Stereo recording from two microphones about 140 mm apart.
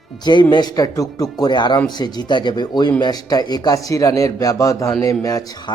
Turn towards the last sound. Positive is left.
turn(degrees=30)  # may be behind; listen again after turning